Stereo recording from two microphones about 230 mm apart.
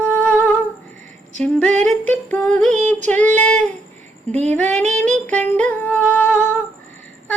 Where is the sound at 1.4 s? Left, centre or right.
Centre.